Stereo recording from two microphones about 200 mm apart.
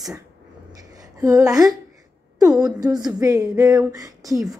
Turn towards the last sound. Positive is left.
turn(degrees=-15)  # may be behind; listen again after turning